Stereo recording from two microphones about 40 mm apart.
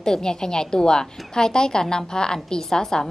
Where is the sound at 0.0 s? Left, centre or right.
Centre.